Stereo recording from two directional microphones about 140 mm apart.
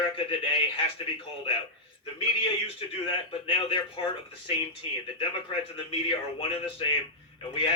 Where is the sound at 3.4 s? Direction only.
40° left (ahead or behind).